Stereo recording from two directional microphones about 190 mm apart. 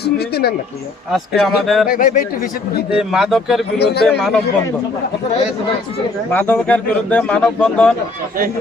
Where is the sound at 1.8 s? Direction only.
50° left (ahead or behind).